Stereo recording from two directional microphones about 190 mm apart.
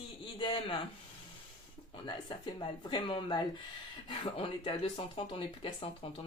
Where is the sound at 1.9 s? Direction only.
25° left (ahead or behind).